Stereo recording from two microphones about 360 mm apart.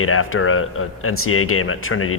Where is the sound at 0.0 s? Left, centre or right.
Left.